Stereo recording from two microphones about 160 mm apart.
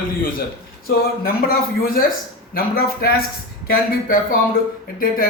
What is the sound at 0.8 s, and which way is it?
A man's voice, 70° left (ahead or behind).